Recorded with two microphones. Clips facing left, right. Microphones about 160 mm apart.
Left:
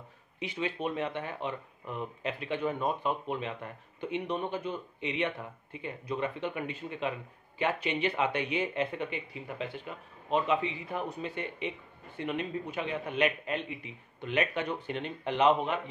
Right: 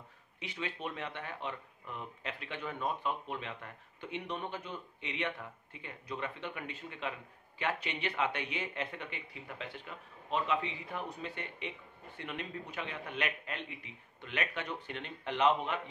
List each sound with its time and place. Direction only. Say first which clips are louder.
0.4 s speech: left 7 dB; 15° left (ahead or behind)